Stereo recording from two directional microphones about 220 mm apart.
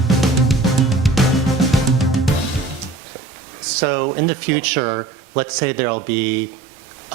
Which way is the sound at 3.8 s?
15° right (ahead or behind).